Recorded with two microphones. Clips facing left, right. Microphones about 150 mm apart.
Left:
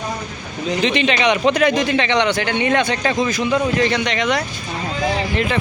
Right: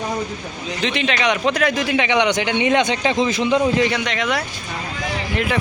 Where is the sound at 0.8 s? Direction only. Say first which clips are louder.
Left 3 dB; centre (ahead or behind); by 3.9 s 20° right (ahead or behind).